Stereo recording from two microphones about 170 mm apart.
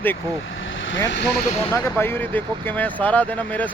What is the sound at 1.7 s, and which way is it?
Speech, 15° left (ahead or behind).